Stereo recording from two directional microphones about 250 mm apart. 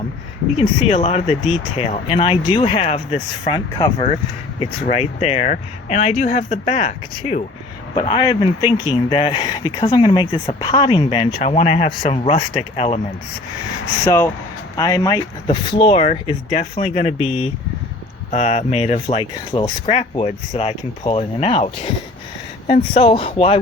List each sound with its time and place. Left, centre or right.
0.5 s speech: left
14.0 s speech: centre